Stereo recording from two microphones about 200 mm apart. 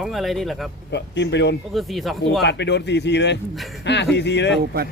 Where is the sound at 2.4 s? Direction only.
60° left (ahead or behind).